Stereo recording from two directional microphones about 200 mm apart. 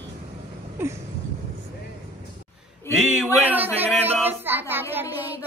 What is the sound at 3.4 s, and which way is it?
Speech, 10° right (ahead or behind).